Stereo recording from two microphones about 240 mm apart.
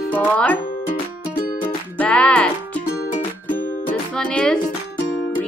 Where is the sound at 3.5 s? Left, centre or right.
Left.